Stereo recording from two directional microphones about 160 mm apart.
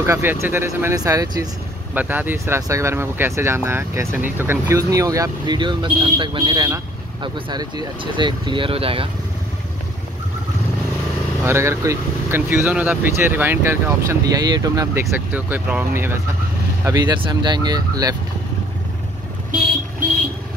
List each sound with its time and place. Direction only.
0.0 s speech: 15° right (ahead or behind)
2.0 s speech: 10° right (ahead or behind); by 9.1 s 35° right (ahead or behind)
11.4 s speech: 15° right (ahead or behind)
15.1 s speech: 10° right (ahead or behind)